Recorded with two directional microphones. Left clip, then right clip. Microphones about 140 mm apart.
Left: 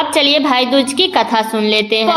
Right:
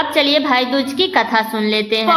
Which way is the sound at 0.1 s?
35° left (ahead or behind).